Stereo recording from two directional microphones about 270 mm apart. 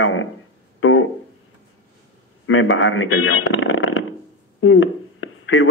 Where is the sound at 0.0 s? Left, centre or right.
Left.